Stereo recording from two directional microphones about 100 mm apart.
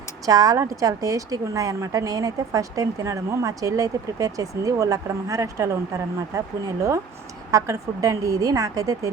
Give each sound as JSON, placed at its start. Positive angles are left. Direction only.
{"t": 0.3, "sound": "a woman's voice", "side_deg": -40}